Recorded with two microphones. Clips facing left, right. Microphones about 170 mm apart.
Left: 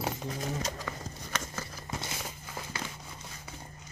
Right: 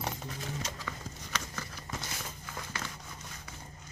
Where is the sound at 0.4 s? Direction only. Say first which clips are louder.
Left 5 dB; 35° left (ahead or behind).